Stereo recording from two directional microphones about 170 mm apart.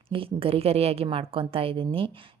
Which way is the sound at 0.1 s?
30° right (ahead or behind).